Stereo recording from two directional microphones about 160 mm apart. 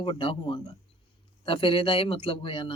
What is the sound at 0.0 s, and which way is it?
Speech, 35° left (ahead or behind).